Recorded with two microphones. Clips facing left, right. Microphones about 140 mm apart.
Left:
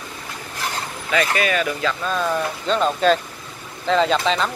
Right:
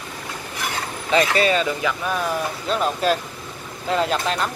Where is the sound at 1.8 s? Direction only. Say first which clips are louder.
Left 1 dB; 15° right (ahead or behind).